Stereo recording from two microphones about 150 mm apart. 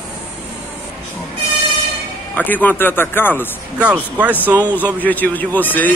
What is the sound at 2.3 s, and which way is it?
Speech, 10° left (ahead or behind).